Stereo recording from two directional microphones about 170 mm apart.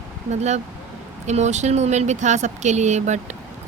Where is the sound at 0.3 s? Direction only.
40° right (ahead or behind).